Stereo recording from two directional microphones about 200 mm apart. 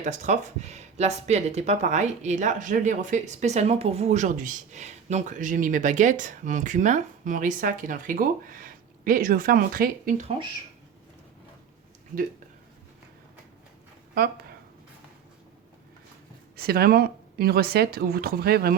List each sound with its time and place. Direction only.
0.0 s speech: 35° right (ahead or behind)
16.6 s speech: 50° right (ahead or behind)